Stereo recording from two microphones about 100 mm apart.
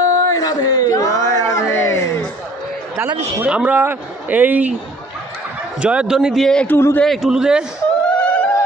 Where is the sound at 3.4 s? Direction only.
15° right (ahead or behind).